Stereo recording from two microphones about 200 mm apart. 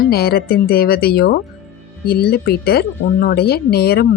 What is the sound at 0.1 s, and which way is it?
Speech, 50° left (ahead or behind).